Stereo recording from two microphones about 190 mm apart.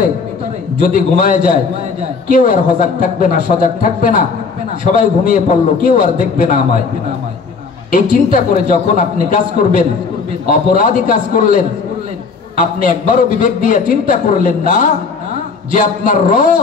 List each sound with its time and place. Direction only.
0.7 s a man's voice: 45° left (ahead or behind)
7.9 s a man's voice: 45° left (ahead or behind)
12.7 s a man's voice: 45° left (ahead or behind)